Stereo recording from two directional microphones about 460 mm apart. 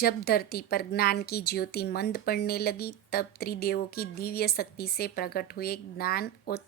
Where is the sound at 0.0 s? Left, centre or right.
Centre.